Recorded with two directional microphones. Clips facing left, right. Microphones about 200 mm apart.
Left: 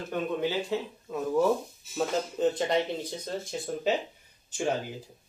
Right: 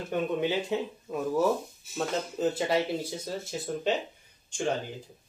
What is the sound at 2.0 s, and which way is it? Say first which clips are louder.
Speech: left 2 dB; centre (ahead or behind).